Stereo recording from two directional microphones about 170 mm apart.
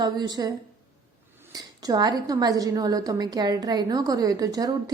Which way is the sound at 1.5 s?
20° right (ahead or behind).